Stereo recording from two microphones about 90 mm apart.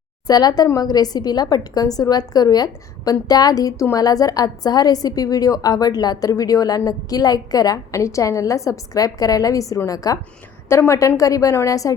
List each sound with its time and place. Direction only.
0.3 s a woman's voice: 45° left (ahead or behind)
10.7 s a woman's voice: 30° left (ahead or behind)